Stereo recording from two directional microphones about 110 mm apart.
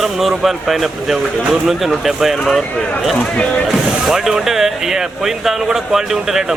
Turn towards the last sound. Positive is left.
turn(degrees=-5)  # may be behind; listen again after turning